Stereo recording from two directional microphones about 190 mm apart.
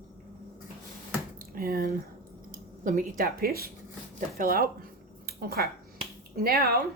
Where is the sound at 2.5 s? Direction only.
40° right (ahead or behind).